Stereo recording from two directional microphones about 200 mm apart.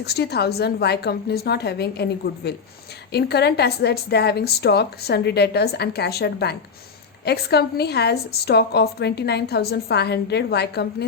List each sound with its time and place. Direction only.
0.0 s a woman's voice: 55° left (ahead or behind)